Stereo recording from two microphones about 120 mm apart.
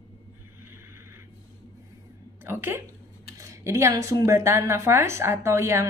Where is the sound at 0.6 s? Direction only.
20° right (ahead or behind).